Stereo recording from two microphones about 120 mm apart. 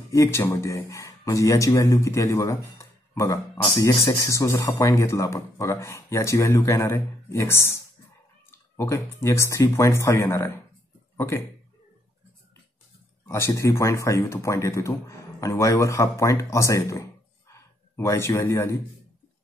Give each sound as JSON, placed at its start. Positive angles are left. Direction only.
{"t": 0.1, "sound": "a man's voice", "side_deg": 25}
{"t": 13.2, "sound": "speech", "side_deg": 25}